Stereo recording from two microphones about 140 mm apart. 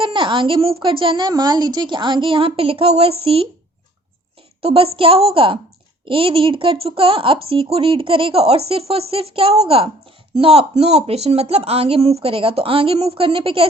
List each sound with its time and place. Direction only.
0.0 s a woman's voice: 35° right (ahead or behind)
4.6 s a woman's voice: 40° right (ahead or behind)